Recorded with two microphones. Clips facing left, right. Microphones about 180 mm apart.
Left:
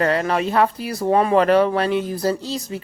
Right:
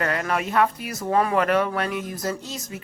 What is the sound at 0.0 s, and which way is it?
Speech, 30° left (ahead or behind).